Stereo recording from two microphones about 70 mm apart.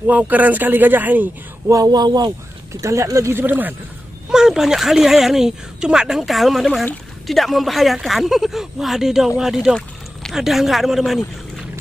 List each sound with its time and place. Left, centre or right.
0.0 s speech: right
1.7 s speech: right
2.7 s speech: right
3.3 s speech: right
4.3 s speech: centre